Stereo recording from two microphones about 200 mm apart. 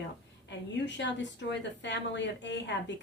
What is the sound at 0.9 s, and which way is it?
A woman's voice, 65° left (ahead or behind).